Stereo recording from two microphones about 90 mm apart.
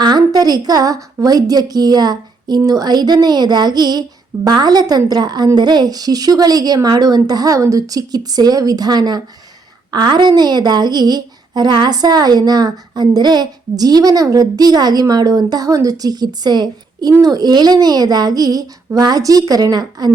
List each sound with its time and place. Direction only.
0.0 s a woman's voice: 50° right (ahead or behind)